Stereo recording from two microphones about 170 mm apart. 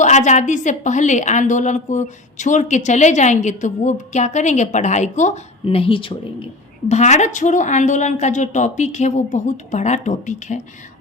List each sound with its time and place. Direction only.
0.0 s a woman's voice: 45° left (ahead or behind)